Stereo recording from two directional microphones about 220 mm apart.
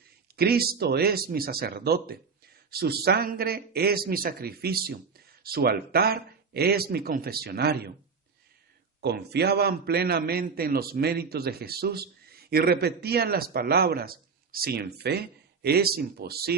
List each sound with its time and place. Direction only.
0.4 s a man's voice: 45° right (ahead or behind)
9.0 s a man's voice: 50° right (ahead or behind)